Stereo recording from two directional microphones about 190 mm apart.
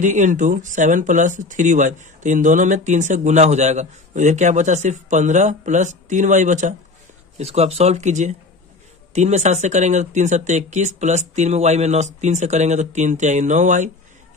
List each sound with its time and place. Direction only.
0.0 s speech: 40° right (ahead or behind)